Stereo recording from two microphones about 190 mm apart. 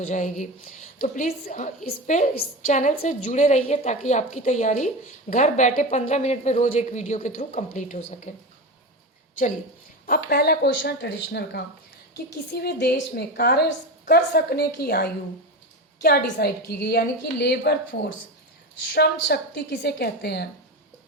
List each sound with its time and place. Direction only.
0.0 s a woman's voice: 40° left (ahead or behind)
10.1 s a woman's voice: 55° left (ahead or behind)